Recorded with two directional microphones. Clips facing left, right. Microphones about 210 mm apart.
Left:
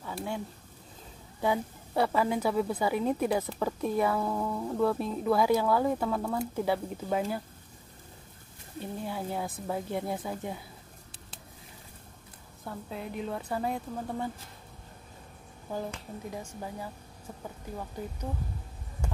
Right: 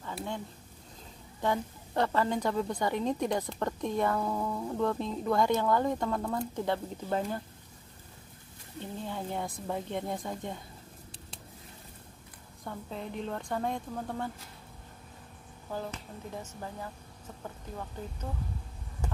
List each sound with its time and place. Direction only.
0.0 s a sound: 10° left (ahead or behind)
1.4 s a woman's voice: 10° left (ahead or behind)
8.7 s speech: 10° left (ahead or behind)
12.6 s a woman's voice: 5° left (ahead or behind)
15.7 s a woman's voice: 15° left (ahead or behind)